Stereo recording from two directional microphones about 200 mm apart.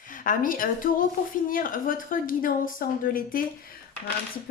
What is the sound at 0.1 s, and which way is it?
A woman's voice, 45° left (ahead or behind).